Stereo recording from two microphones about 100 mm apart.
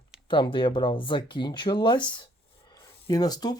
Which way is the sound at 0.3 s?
55° left (ahead or behind).